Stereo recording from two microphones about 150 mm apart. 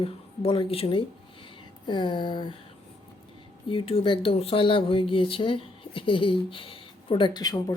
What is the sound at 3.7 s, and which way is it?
Speech, 40° left (ahead or behind).